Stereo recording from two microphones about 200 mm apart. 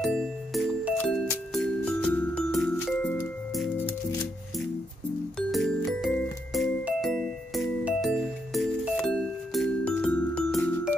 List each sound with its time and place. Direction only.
0.0 s music: centre (ahead or behind)
5.5 s music: centre (ahead or behind)